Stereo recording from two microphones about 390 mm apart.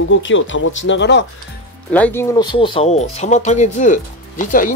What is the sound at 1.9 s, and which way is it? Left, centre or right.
Speech, centre.